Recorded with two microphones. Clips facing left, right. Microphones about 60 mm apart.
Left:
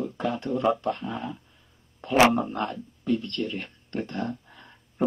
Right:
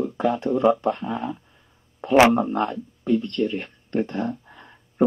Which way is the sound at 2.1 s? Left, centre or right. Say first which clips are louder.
Right 4 dB; right.